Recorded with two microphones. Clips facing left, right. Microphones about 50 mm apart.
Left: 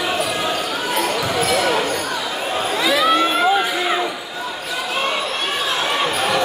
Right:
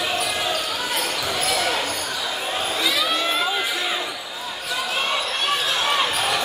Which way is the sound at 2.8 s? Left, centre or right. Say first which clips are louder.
Left 8 dB; left.